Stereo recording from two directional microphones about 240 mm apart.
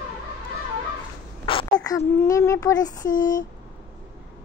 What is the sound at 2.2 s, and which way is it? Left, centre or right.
Speech, centre.